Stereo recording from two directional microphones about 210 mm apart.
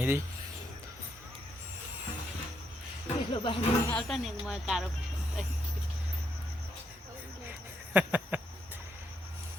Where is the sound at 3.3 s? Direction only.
25° left (ahead or behind).